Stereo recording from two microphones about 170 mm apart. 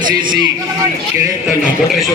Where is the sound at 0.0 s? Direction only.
25° right (ahead or behind).